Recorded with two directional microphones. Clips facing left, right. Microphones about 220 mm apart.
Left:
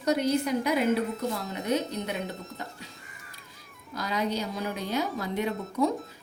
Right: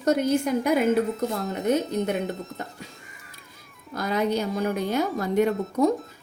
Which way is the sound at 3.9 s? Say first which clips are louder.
Right 5 dB; 50° right (ahead or behind).